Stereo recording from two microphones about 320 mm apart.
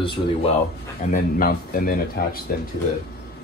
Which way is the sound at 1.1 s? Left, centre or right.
Left.